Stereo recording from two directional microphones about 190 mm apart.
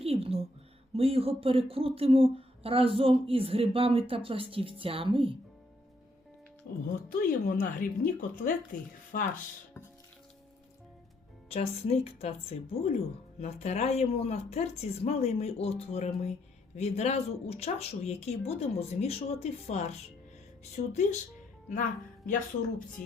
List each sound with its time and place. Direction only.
0.0 s a sound: 30° right (ahead or behind)
0.9 s speech: 30° right (ahead or behind)
6.7 s speech: 55° left (ahead or behind)
11.4 s a woman's voice: 30° left (ahead or behind)
23.0 s speech: 45° left (ahead or behind)